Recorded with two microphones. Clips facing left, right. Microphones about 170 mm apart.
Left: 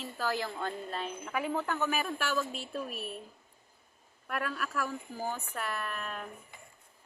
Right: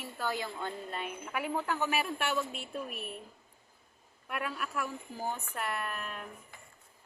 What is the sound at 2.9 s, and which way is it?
Speech, 30° left (ahead or behind).